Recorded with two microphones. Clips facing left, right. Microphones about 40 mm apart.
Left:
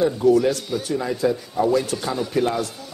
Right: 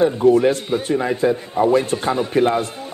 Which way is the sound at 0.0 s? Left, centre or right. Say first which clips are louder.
Right 3 dB; right.